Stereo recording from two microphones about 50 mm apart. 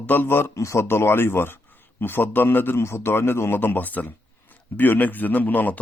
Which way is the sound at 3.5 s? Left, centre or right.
Left.